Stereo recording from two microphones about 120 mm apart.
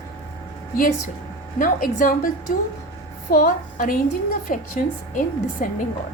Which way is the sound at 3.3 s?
90° left.